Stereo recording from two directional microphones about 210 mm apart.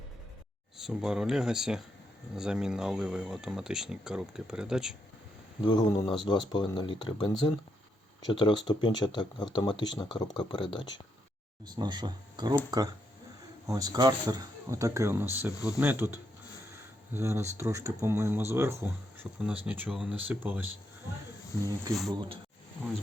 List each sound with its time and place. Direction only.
0.8 s speech: 5° right (ahead or behind)
5.6 s speech: 20° left (ahead or behind)
11.6 s speech: 20° right (ahead or behind)
13.7 s speech: 15° right (ahead or behind)
22.1 s speech: 20° right (ahead or behind)